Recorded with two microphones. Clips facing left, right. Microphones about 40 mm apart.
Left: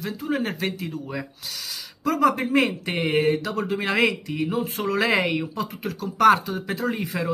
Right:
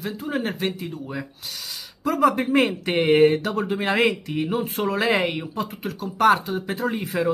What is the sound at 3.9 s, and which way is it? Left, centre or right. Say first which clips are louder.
Speech: right 1 dB; right.